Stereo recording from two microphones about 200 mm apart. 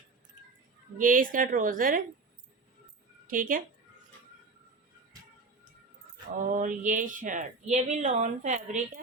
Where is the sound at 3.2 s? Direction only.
45° right (ahead or behind).